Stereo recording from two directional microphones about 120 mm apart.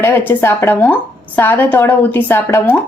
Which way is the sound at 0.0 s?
20° left (ahead or behind).